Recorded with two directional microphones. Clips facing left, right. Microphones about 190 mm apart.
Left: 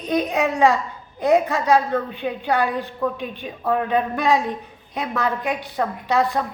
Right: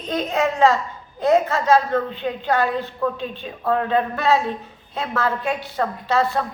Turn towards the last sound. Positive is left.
turn(degrees=15)  # may be behind; listen again after turning